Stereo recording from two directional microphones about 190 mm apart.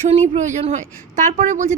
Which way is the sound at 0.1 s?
35° right (ahead or behind).